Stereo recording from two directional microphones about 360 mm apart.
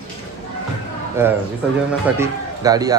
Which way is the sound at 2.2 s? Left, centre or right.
Centre.